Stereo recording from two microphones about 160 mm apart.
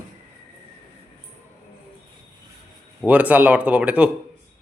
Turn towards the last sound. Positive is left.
turn(degrees=-5)  # may be behind; listen again after turning